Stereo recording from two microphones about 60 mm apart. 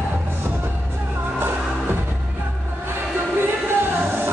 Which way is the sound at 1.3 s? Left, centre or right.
Right.